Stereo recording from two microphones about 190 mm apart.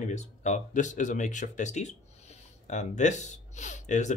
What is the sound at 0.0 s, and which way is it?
Speech, 35° left (ahead or behind).